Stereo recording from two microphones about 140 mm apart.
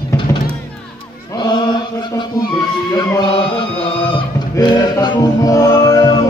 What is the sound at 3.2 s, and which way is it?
Chant, 35° left (ahead or behind).